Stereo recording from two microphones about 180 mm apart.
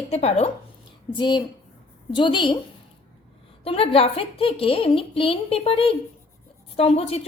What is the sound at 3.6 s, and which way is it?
A woman's voice, 30° left (ahead or behind).